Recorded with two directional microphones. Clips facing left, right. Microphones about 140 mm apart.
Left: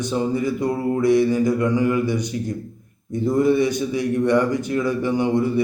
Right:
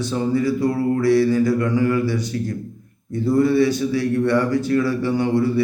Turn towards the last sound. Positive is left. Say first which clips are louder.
# right 1 dB
turn(degrees=20)  # may be behind; listen again after turning